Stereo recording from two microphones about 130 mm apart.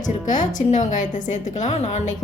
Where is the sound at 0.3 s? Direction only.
70° left (ahead or behind).